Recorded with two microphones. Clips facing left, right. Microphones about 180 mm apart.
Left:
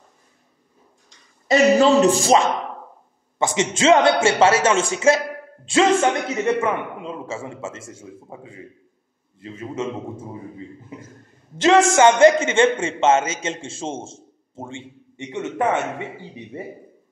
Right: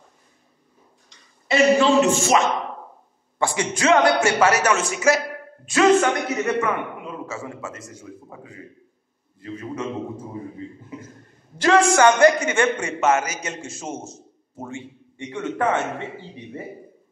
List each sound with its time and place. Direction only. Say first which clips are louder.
1.5 s a man's voice: left 2 dB; 40° left (ahead or behind)
3.3 s a man's voice: left 2 dB; 20° left (ahead or behind)
11.5 s a man's voice: left 2 dB; 20° left (ahead or behind)